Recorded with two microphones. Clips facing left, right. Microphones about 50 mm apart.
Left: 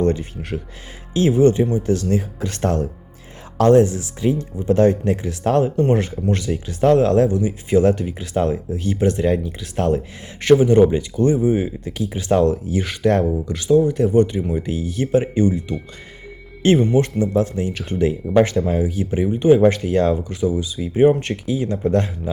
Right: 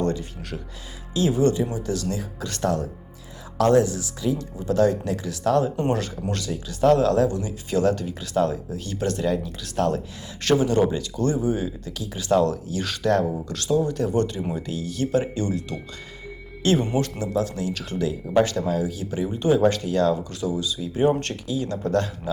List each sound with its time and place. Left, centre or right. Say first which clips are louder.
0.0 s speech: left 6 dB; left
16.9 s speech: left 7 dB; left
21.1 s speech: left 5 dB; centre